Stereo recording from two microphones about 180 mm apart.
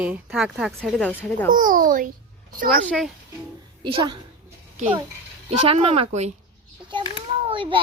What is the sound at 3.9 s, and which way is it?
Speech, 25° right (ahead or behind).